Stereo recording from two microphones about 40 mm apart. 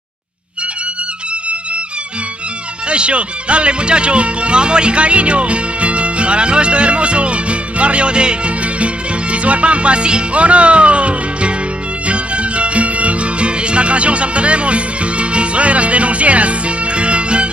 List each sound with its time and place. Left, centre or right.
2.9 s speech: right
12.1 s music: right